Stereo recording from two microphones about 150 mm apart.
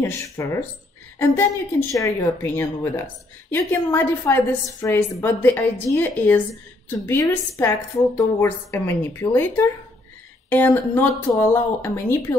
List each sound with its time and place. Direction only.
0.0 s a woman's voice: 20° left (ahead or behind)